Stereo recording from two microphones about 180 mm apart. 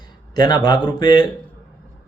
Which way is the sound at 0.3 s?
25° left (ahead or behind).